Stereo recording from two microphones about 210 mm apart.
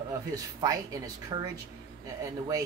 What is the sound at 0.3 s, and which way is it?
A man's voice, 15° right (ahead or behind).